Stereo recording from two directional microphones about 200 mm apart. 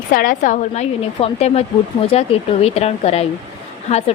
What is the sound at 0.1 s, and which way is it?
A woman's voice, 45° left (ahead or behind).